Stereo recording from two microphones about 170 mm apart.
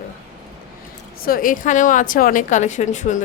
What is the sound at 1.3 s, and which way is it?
A woman's voice, 55° left (ahead or behind).